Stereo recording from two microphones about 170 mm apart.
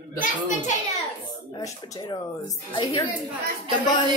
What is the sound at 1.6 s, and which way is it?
Speech, 25° left (ahead or behind).